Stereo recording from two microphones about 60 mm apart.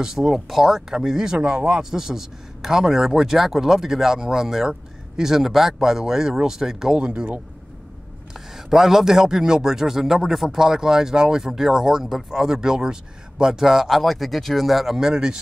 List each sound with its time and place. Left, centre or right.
0.0 s speech: centre
7.1 s speech: right
8.3 s speech: centre